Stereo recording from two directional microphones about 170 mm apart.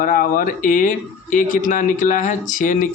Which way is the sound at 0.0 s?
55° left (ahead or behind).